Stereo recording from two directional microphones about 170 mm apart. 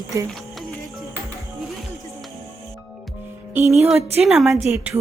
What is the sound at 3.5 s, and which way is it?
Speech, 15° right (ahead or behind).